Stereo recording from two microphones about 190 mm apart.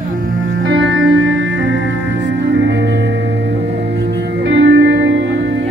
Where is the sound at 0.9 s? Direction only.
90° right.